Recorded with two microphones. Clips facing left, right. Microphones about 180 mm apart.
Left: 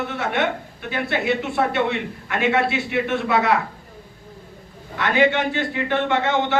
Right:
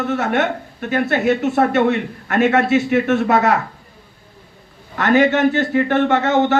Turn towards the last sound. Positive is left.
turn(degrees=-45)  # may be behind; listen again after turning